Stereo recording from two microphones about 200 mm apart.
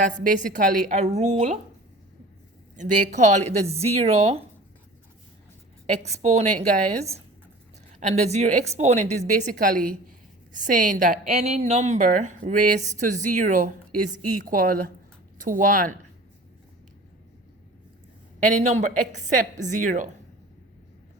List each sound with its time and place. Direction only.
0.6 s speech: 40° right (ahead or behind)
2.7 s speech: 40° right (ahead or behind)
5.8 s a woman's voice: 35° right (ahead or behind)
18.3 s speech: 35° right (ahead or behind)